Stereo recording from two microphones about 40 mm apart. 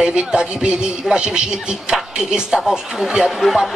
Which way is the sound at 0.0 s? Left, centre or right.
Right.